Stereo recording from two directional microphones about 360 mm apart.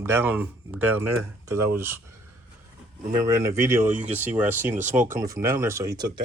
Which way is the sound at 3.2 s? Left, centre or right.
Centre.